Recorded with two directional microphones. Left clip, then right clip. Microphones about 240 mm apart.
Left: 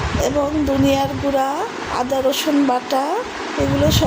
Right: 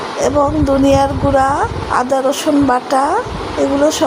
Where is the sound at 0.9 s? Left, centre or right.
Centre.